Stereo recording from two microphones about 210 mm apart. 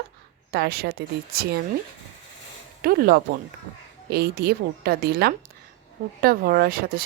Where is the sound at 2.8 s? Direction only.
45° right (ahead or behind).